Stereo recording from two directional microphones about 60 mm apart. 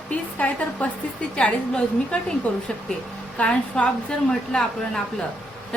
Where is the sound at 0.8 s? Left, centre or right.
Left.